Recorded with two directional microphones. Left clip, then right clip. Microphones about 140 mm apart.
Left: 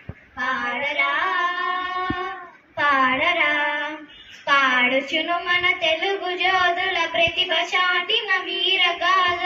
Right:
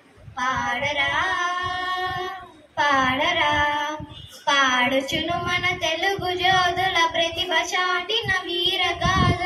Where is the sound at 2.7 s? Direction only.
15° left (ahead or behind).